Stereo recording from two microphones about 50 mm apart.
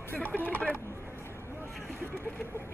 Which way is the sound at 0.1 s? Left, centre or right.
Left.